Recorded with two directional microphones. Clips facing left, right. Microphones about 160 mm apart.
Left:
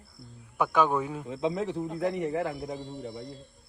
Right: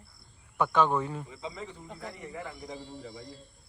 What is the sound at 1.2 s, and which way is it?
A man's voice, 70° left (ahead or behind).